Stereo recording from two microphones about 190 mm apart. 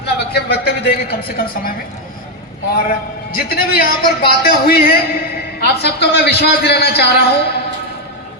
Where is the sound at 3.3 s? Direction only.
50° left (ahead or behind).